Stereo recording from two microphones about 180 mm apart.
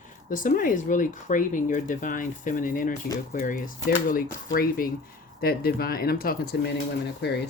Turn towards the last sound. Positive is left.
turn(degrees=70)  # may be behind; listen again after turning